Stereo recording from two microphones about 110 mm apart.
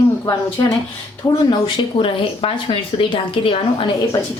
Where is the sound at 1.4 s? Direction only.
50° left (ahead or behind).